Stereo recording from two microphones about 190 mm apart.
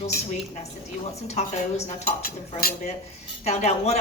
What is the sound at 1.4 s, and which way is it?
Speech, 35° left (ahead or behind).